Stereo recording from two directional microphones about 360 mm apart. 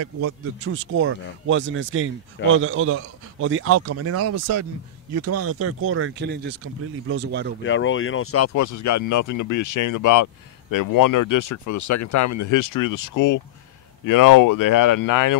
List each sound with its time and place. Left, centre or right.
0.0 s speech: right
7.6 s speech: left
8.5 s speech: left